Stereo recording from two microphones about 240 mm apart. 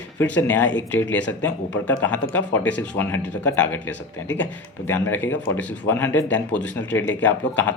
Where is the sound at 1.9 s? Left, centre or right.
Centre.